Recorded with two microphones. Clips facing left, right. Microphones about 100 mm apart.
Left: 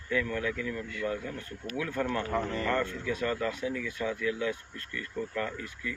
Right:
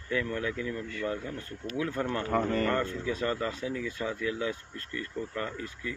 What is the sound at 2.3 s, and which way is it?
Speech, 55° right (ahead or behind).